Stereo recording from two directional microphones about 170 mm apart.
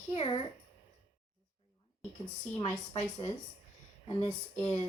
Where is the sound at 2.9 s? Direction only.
25° left (ahead or behind).